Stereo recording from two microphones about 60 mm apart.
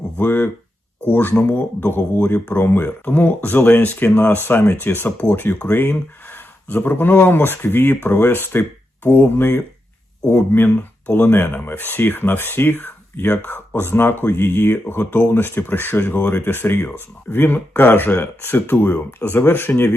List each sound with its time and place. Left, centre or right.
0.2 s speech: left